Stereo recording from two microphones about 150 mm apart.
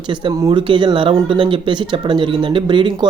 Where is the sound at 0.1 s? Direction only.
30° right (ahead or behind).